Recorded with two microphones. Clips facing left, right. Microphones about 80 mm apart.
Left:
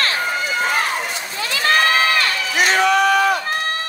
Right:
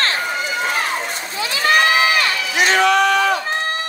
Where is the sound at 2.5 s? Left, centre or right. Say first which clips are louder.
Right 1 dB; centre.